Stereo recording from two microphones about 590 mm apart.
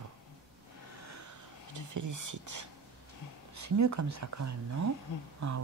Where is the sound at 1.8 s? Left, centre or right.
Right.